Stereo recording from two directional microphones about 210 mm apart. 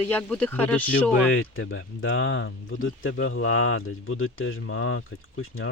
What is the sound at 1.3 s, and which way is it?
Speech, 75° left (ahead or behind).